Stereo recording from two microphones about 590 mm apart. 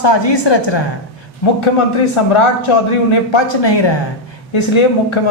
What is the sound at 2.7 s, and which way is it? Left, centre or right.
A woman's voice, left.